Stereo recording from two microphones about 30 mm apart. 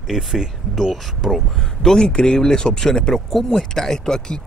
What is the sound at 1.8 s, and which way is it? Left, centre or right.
Speech, centre.